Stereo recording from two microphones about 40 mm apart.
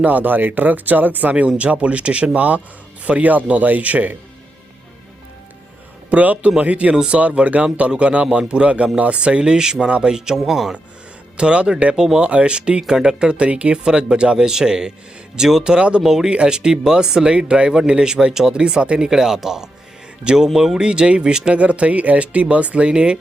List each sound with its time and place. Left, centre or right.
0.0 s speech: right
6.1 s speech: right
6.9 s speech: centre
7.2 s speech: right; by 10.8 s centre
11.3 s speech: right; by 15.6 s centre
15.6 s speech: right
16.0 s speech: centre
16.3 s speech: right
19.0 s speech: centre
21.6 s speech: right